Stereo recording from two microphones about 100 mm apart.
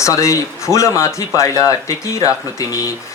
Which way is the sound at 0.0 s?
30° left (ahead or behind).